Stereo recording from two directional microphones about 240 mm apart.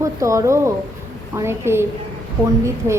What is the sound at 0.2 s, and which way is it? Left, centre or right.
A woman's voice, centre.